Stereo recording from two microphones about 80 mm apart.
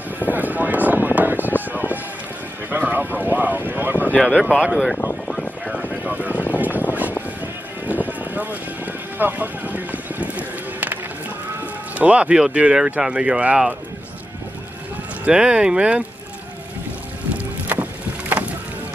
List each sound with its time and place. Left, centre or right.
0.3 s a sound: right
1.7 s run: right
2.7 s a sound: right
4.3 s speech: centre
5.7 s vehicle: centre
6.5 s boat: right
7.8 s a sound: right
11.9 s speech: centre
15.2 s speech: centre
17.7 s boat: right